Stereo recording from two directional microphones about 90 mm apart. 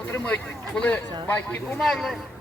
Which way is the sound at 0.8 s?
20° left (ahead or behind).